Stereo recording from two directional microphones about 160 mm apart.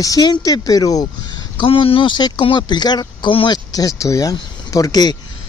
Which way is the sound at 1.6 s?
35° left (ahead or behind).